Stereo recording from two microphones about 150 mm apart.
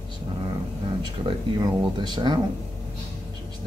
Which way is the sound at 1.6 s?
30° right (ahead or behind).